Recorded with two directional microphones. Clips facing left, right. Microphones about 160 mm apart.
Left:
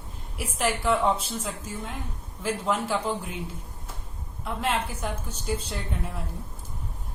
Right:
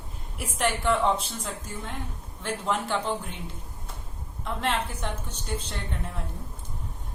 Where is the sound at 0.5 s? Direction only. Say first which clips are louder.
Even; 5° left (ahead or behind).